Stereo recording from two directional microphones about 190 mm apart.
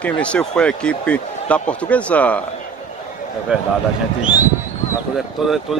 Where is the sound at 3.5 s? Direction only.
5° right (ahead or behind).